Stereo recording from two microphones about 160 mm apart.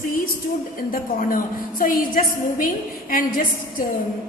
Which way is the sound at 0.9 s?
60° left (ahead or behind).